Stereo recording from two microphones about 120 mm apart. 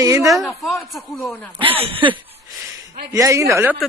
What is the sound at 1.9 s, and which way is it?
Chuckle, 45° right (ahead or behind).